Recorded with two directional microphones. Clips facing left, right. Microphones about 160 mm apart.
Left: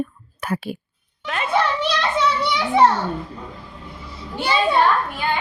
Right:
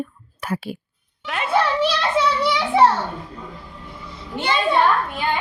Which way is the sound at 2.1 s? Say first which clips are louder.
Right 2 dB; 5° right (ahead or behind).